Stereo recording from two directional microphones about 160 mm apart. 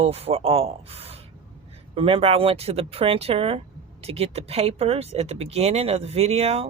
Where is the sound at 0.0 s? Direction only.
40° right (ahead or behind).